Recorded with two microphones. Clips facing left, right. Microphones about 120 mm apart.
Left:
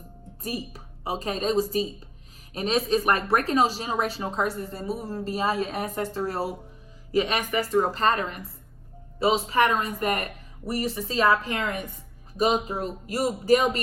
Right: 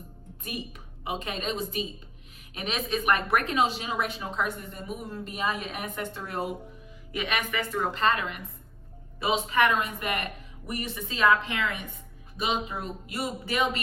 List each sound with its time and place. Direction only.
0.4 s speech: 35° left (ahead or behind)